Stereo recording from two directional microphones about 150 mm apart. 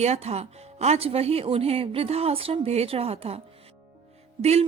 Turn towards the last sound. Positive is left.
turn(degrees=-45)  # may be behind; listen again after turning